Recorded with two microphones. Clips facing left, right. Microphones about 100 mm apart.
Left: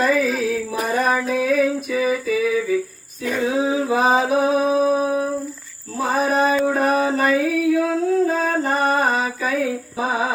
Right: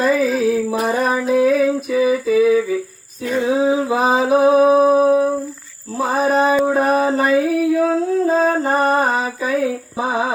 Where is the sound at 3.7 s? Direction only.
25° right (ahead or behind).